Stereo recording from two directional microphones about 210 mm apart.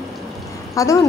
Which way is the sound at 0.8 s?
15° left (ahead or behind).